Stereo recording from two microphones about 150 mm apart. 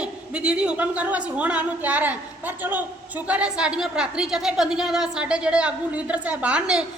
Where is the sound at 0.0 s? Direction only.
5° right (ahead or behind).